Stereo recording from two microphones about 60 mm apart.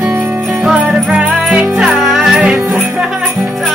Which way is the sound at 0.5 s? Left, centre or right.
Centre.